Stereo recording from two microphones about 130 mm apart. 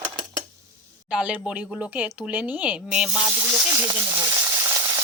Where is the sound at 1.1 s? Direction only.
10° right (ahead or behind).